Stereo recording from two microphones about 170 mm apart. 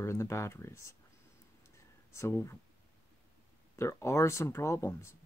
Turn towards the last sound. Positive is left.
turn(degrees=15)  # may be behind; listen again after turning